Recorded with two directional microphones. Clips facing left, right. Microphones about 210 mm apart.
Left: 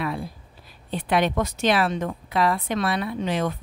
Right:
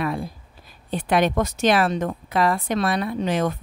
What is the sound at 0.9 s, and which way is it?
A woman's voice, 45° right (ahead or behind).